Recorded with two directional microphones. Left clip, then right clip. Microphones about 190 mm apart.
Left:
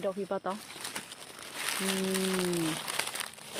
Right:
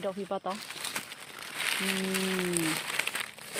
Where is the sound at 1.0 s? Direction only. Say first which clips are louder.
Right 3 dB; 45° right (ahead or behind).